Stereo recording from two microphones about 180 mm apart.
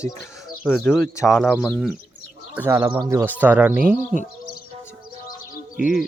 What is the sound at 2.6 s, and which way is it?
Speech, 10° right (ahead or behind).